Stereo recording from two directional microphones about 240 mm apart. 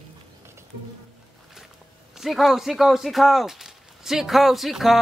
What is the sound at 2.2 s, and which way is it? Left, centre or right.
Speech, centre.